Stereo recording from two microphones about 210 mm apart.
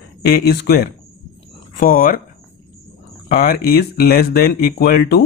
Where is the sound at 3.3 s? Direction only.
45° left (ahead or behind).